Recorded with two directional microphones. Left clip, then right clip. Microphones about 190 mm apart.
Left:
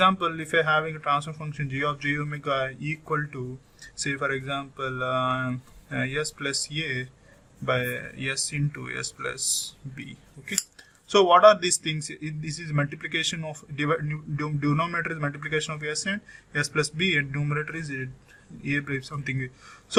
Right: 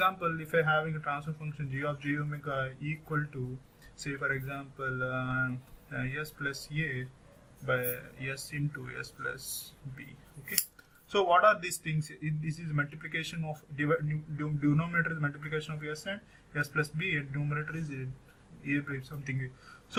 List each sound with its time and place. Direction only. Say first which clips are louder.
0.0 s a man's voice: left 7 dB; 40° left (ahead or behind)
11.1 s speech: left 8 dB; 40° left (ahead or behind)
18.6 s speech: left 6 dB; 40° left (ahead or behind)